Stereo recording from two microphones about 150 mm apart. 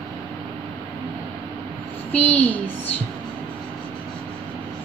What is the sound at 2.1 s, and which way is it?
Speech, 10° left (ahead or behind).